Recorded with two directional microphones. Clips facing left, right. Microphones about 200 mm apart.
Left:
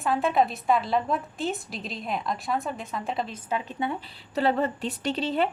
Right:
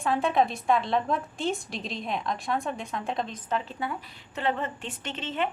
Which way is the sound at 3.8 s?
25° left (ahead or behind).